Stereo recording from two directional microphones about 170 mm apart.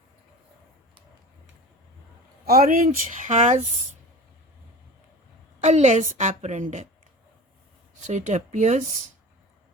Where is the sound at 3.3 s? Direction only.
50° right (ahead or behind).